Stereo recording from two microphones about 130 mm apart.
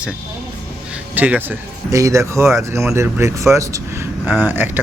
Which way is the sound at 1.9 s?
25° right (ahead or behind).